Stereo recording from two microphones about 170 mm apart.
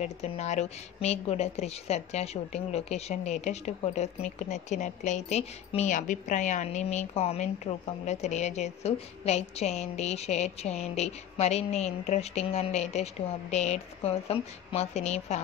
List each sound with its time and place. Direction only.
0.0 s a woman's voice: 40° left (ahead or behind)